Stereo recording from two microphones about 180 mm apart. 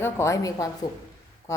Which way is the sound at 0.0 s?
15° left (ahead or behind).